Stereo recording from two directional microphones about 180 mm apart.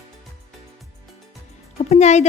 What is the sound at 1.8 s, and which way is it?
Speech, 40° left (ahead or behind).